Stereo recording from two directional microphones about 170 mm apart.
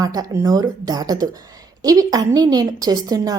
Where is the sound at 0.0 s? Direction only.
20° right (ahead or behind).